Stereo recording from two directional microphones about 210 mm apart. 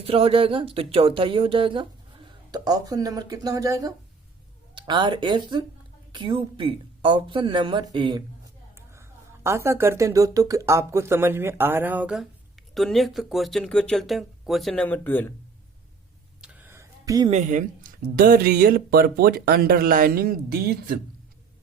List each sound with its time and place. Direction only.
0.0 s a woman's voice: 25° right (ahead or behind); by 15.3 s 10° left (ahead or behind)
16.4 s a sound: 5° right (ahead or behind)
17.3 s speech: 35° right (ahead or behind)